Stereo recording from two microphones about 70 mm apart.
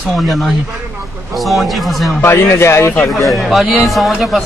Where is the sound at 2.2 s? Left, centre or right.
Left.